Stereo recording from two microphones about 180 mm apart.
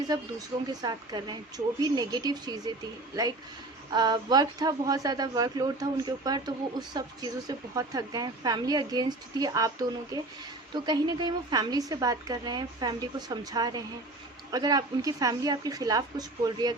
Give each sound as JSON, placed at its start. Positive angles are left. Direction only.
{"t": 0.1, "sound": "speech", "side_deg": -20}
{"t": 3.9, "sound": "speech", "side_deg": -20}